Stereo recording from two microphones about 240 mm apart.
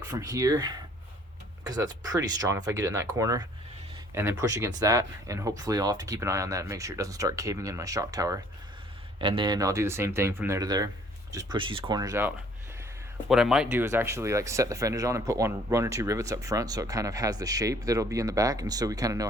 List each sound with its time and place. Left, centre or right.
0.1 s speech: centre
13.2 s speech: centre